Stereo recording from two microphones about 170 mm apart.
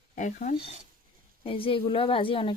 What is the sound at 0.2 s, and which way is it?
Speech, 50° left (ahead or behind).